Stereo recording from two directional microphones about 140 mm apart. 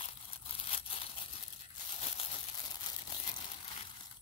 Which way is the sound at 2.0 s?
45° left (ahead or behind).